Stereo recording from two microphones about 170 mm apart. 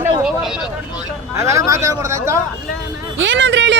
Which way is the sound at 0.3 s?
5° right (ahead or behind).